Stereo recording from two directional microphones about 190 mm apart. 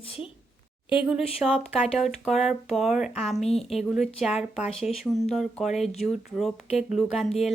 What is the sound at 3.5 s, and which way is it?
Speech, 35° left (ahead or behind).